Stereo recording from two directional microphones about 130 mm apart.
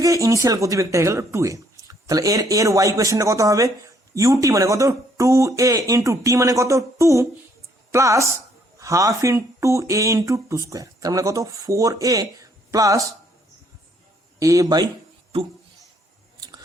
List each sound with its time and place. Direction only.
0.0 s speech: 25° right (ahead or behind)
14.3 s speech: 25° right (ahead or behind)